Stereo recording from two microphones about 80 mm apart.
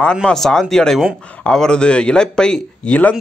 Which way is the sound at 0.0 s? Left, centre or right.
Centre.